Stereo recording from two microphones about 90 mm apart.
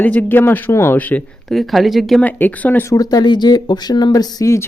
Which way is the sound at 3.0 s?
50° left (ahead or behind).